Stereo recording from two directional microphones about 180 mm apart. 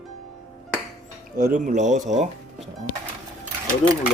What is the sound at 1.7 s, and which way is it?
Speech, 40° right (ahead or behind).